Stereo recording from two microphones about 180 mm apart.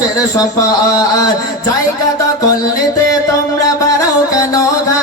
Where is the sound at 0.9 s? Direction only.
20° left (ahead or behind).